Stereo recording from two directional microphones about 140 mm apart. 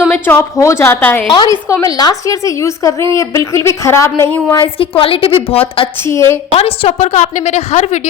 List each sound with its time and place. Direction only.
0.1 s a woman's voice: 15° left (ahead or behind)
1.3 s a woman's voice: 30° left (ahead or behind)
4.5 s a woman's voice: 35° left (ahead or behind)
6.0 s a woman's voice: 20° left (ahead or behind)
6.6 s a woman's voice: 45° left (ahead or behind)